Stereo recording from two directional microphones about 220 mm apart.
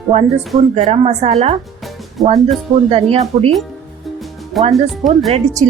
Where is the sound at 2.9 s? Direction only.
25° right (ahead or behind).